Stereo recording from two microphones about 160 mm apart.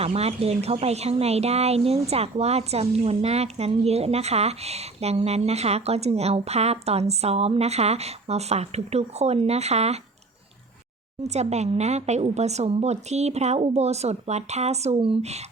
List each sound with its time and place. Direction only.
0.0 s speech: 40° right (ahead or behind)
11.2 s speech: 45° right (ahead or behind)